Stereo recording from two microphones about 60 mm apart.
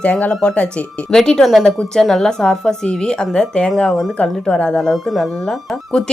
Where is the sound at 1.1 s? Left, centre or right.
Centre.